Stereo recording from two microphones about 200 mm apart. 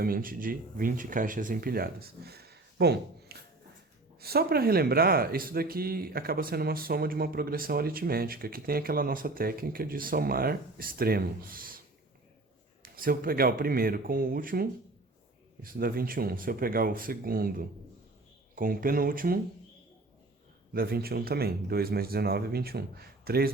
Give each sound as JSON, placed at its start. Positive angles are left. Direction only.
{"t": 0.0, "sound": "speech", "side_deg": -45}
{"t": 12.8, "sound": "speech", "side_deg": -45}
{"t": 20.7, "sound": "speech", "side_deg": -50}